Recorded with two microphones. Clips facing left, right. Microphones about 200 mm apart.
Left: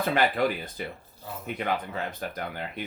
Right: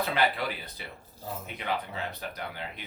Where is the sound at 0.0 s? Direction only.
50° left (ahead or behind).